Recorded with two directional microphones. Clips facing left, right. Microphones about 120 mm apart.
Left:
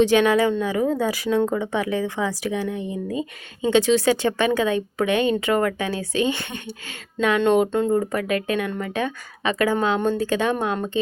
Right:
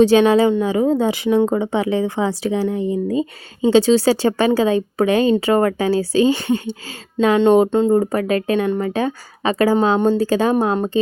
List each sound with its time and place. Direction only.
0.0 s a woman's voice: 30° right (ahead or behind)